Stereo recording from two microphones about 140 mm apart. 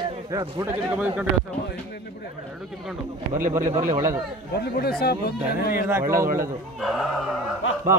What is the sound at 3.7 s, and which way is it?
Speech, 55° right (ahead or behind).